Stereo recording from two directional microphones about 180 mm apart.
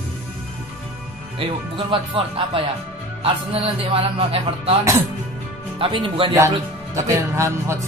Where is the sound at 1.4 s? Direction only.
30° right (ahead or behind).